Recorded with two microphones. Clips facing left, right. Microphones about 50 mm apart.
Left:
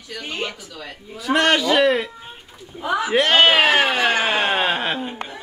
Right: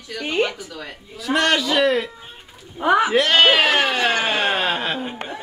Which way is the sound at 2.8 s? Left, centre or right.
Right.